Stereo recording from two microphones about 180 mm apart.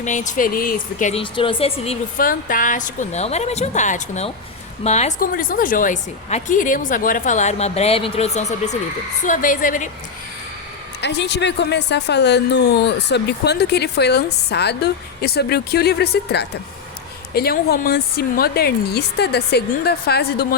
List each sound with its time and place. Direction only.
0.0 s speech: 45° left (ahead or behind)
1.2 s a woman's voice: 30° left (ahead or behind)
2.1 s a woman's voice: 50° left (ahead or behind)
5.2 s speech: 50° left (ahead or behind)
11.0 s a woman's voice: 70° left (ahead or behind)